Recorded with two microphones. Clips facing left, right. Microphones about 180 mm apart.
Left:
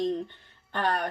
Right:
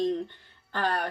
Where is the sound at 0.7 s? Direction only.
20° left (ahead or behind).